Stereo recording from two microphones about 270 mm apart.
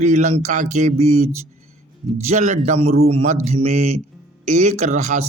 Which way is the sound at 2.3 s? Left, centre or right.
Right.